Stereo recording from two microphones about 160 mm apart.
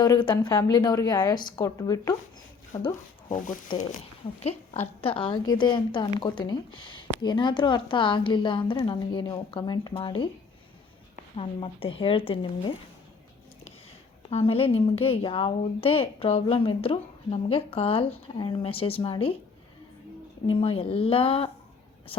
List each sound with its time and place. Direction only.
0.0 s a woman's voice: 30° left (ahead or behind)
3.2 s speech: 55° left (ahead or behind)
4.4 s a woman's voice: 40° left (ahead or behind)
11.3 s a woman's voice: 35° left (ahead or behind)
14.3 s a woman's voice: 40° left (ahead or behind)
20.5 s a woman's voice: 35° left (ahead or behind)